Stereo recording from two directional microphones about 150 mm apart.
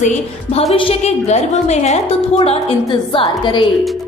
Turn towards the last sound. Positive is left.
turn(degrees=30)  # may be behind; listen again after turning